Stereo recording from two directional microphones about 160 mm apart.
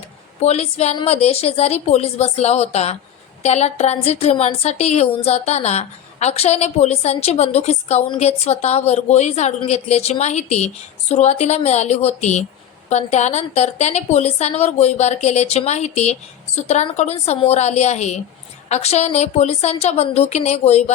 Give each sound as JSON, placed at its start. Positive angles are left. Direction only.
{"t": 0.4, "sound": "a woman's voice", "side_deg": 40}